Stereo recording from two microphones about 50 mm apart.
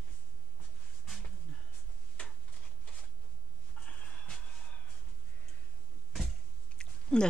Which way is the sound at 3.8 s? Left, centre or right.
Left.